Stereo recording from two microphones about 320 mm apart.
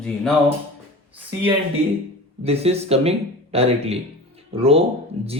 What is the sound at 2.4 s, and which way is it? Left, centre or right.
Speech, centre.